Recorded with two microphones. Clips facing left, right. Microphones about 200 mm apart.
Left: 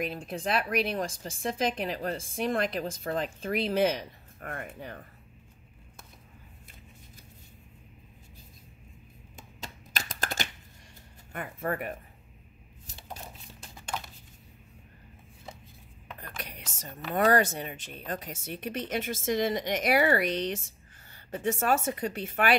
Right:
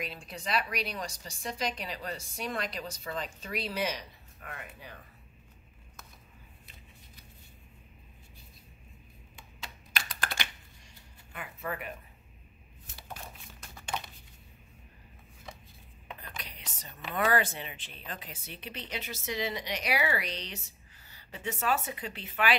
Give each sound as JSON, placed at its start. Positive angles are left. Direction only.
{"t": 0.0, "sound": "speech", "side_deg": 50}
{"t": 9.4, "sound": "typing", "side_deg": 45}
{"t": 11.3, "sound": "speech", "side_deg": 50}
{"t": 12.9, "sound": "a sound", "side_deg": 20}
{"t": 16.2, "sound": "speech", "side_deg": 50}